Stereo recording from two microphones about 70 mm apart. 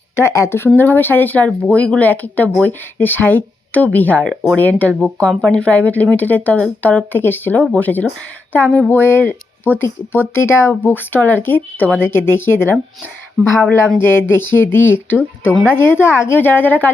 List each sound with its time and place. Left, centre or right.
0.2 s speech: left
0.8 s speech: left
14.0 s speech: left